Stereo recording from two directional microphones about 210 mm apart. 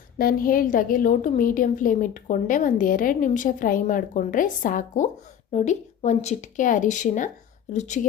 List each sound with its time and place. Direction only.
0.2 s a woman's voice: 45° left (ahead or behind)